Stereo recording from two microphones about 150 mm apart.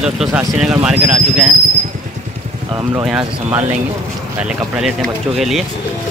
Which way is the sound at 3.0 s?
5° right (ahead or behind).